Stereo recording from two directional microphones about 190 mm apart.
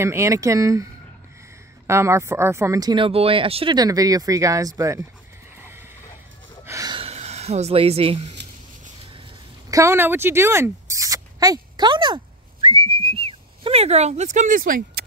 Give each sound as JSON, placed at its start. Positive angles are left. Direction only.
{"t": 0.0, "sound": "speech", "side_deg": -15}
{"t": 1.9, "sound": "speech", "side_deg": -15}
{"t": 6.6, "sound": "a sound", "side_deg": -15}
{"t": 9.7, "sound": "speech", "side_deg": -15}
{"t": 12.6, "sound": "whistling", "side_deg": -30}